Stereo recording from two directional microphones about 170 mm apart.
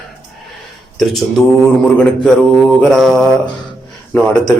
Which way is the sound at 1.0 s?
Centre (ahead or behind).